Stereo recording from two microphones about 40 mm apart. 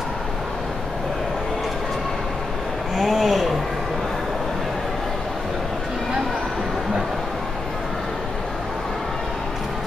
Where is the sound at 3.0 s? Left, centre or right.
Centre.